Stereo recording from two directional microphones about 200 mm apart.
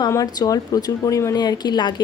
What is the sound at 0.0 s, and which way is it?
Speech, 20° left (ahead or behind).